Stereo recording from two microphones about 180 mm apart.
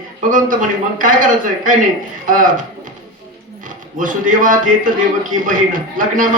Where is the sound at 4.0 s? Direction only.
45° right (ahead or behind).